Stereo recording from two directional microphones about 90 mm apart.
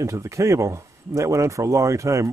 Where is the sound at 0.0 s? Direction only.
35° right (ahead or behind).